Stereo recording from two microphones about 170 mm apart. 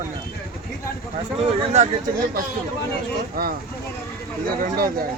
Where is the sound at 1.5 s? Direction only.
40° right (ahead or behind).